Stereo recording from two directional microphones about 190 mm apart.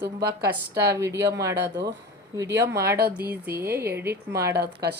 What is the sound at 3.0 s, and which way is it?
Speech, 55° right (ahead or behind).